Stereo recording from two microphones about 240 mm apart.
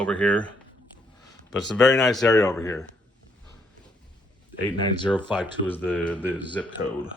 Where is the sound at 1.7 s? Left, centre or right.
Centre.